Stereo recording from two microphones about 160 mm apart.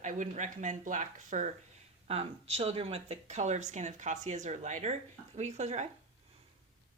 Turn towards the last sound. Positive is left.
turn(degrees=-45)  # may be behind; listen again after turning